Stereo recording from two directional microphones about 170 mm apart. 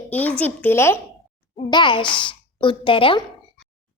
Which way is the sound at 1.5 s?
30° left (ahead or behind).